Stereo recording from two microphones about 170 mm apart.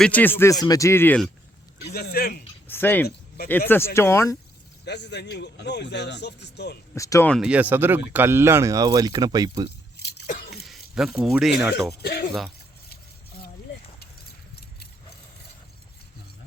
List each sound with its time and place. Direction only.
0.0 s speech: 10° left (ahead or behind)
1.8 s a man's voice: 70° left (ahead or behind)
2.6 s speech: 10° left (ahead or behind)
3.1 s a sound: 65° left (ahead or behind)
3.7 s speech: 15° left (ahead or behind)
4.9 s speech: 90° left
6.9 s speech: 20° left (ahead or behind)
7.3 s speech: centre (ahead or behind); by 9.6 s 25° right (ahead or behind)
10.0 s a sound: 75° left (ahead or behind)
10.2 s a sound: 50° left (ahead or behind)
10.5 s a sound: centre (ahead or behind)
12.0 s a man's voice: 70° left (ahead or behind)